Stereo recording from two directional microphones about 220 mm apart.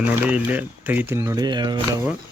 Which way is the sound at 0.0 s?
5° right (ahead or behind).